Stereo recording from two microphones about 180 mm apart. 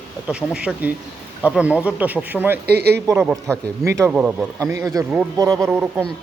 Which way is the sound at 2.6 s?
65° right (ahead or behind).